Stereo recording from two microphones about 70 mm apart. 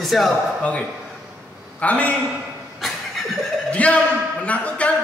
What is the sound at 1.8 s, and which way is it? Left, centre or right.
Speech, left.